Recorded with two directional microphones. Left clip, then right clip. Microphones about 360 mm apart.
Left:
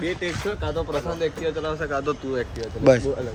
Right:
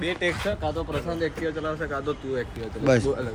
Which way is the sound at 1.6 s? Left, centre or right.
Centre.